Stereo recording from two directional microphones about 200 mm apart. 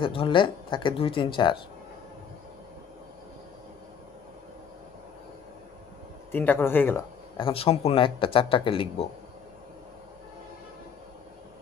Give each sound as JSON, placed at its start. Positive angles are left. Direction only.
{"t": 0.0, "sound": "speech", "side_deg": 25}
{"t": 6.3, "sound": "a man's voice", "side_deg": 10}
{"t": 7.3, "sound": "speech", "side_deg": 25}